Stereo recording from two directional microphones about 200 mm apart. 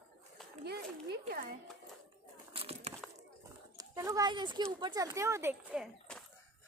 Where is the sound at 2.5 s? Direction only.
30° right (ahead or behind).